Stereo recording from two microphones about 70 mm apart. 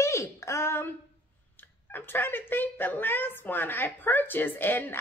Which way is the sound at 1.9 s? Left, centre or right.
Left.